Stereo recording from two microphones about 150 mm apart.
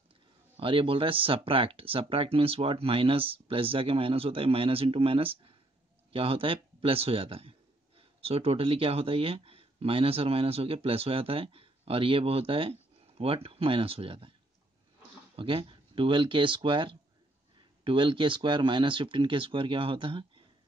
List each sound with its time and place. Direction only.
0.6 s speech: 35° right (ahead or behind)
15.3 s speech: 35° right (ahead or behind)